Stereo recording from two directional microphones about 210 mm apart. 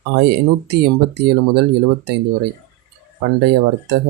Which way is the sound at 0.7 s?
55° right (ahead or behind).